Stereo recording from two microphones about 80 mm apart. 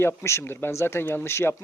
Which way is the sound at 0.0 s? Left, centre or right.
Left.